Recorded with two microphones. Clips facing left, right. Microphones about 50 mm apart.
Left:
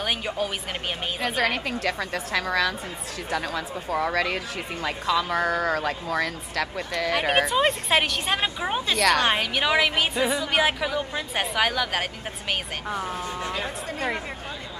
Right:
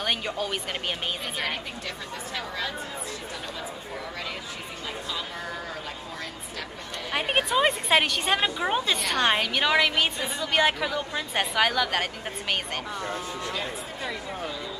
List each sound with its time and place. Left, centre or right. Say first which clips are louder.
1.2 s a woman's voice: left 6 dB; left
7.3 s a woman's voice: right 1 dB; centre
8.9 s a woman's voice: left 7 dB; left
9.2 s a woman's voice: even; centre